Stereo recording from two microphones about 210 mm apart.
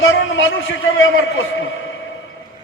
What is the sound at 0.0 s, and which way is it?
A man's voice, 65° left (ahead or behind).